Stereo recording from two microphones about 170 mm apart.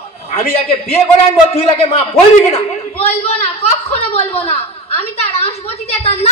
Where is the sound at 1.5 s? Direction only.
40° left (ahead or behind).